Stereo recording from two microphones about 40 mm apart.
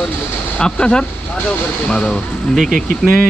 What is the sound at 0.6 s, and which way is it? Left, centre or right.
Speech, left.